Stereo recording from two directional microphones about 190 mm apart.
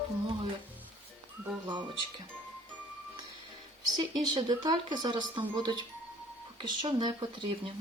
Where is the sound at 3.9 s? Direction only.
20° right (ahead or behind).